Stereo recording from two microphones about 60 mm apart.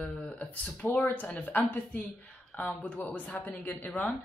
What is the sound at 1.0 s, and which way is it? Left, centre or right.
Speech, left.